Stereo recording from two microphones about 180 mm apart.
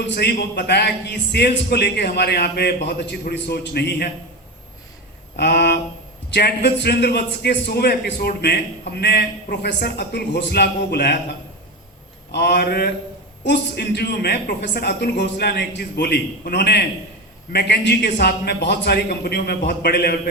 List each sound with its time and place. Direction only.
0.1 s a man's voice: 65° left (ahead or behind)
5.4 s a man's voice: 65° left (ahead or behind)
12.3 s a man's voice: 65° left (ahead or behind)
13.4 s a man's voice: 70° left (ahead or behind)